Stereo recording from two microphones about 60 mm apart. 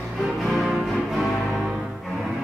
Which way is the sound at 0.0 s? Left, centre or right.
Centre.